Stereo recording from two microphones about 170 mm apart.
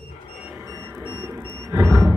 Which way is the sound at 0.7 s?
15° right (ahead or behind).